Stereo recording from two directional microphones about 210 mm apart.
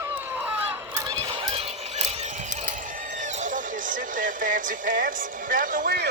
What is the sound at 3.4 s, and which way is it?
Speech, 40° right (ahead or behind).